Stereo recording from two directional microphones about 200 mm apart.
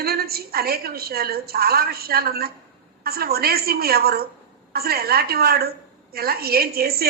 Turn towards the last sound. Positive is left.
turn(degrees=-50)  # may be behind; listen again after turning